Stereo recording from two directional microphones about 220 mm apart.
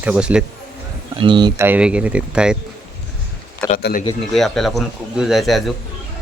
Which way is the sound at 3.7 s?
40° left (ahead or behind).